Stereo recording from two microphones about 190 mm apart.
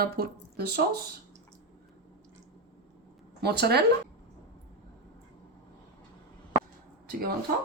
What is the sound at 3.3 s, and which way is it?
Speech, 60° right (ahead or behind).